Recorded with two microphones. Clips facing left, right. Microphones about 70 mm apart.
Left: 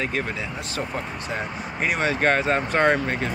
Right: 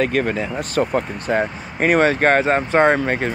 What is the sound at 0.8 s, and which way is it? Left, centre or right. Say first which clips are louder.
Speech: right 11 dB; right.